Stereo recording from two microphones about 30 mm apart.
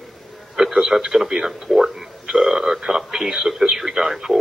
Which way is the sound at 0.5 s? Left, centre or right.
Right.